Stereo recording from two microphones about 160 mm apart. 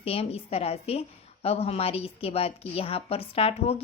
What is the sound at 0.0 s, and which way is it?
Speech, 40° left (ahead or behind).